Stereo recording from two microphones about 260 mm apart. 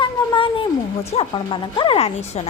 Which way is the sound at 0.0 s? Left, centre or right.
Centre.